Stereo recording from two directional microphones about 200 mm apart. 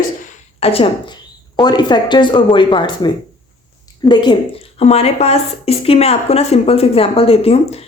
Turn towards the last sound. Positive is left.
turn(degrees=30)  # may be behind; listen again after turning